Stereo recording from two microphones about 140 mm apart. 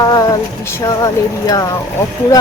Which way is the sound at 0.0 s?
25° left (ahead or behind).